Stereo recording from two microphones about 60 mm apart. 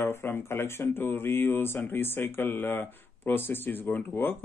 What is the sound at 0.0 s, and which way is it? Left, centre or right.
Speech, left.